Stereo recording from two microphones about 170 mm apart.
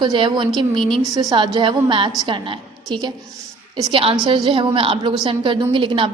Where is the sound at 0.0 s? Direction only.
25° right (ahead or behind).